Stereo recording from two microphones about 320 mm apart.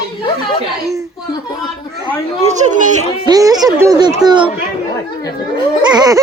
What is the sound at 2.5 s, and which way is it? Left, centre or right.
A child's voice, right.